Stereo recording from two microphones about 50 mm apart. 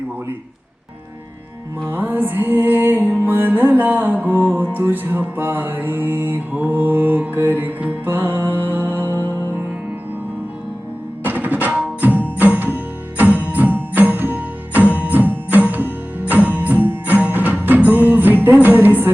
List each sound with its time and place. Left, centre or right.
1.9 s music: right
4.8 s mantra: right
11.2 s music: right